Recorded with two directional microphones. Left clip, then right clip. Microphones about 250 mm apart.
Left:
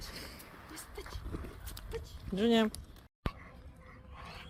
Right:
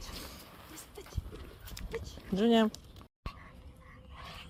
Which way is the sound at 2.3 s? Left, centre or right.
Centre.